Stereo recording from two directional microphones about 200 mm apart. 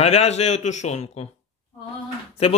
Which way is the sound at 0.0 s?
30° left (ahead or behind).